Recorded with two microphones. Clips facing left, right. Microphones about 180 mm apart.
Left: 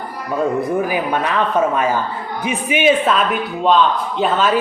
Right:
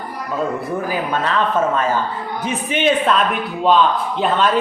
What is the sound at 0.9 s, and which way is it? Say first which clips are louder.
A man's voice: left 1 dB; 15° left (ahead or behind).